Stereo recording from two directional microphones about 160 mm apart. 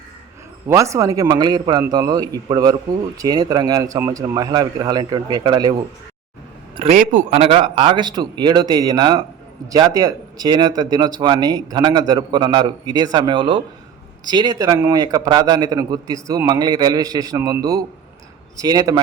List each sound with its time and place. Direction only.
0.7 s a man's voice: 20° right (ahead or behind)
6.9 s a man's voice: 55° right (ahead or behind); by 18.9 s 25° right (ahead or behind)